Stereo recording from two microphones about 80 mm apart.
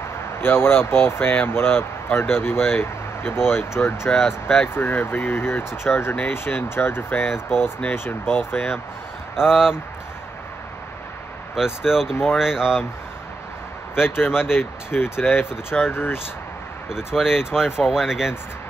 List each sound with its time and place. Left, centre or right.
0.4 s speech: left
4.1 s speech: centre
4.7 s speech: left
9.3 s speech: centre
11.5 s speech: centre
14.0 s speech: left
16.9 s speech: centre